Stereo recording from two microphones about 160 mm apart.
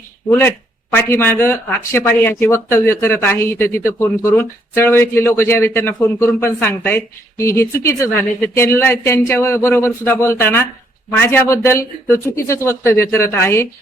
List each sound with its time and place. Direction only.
0.3 s speech: 15° left (ahead or behind)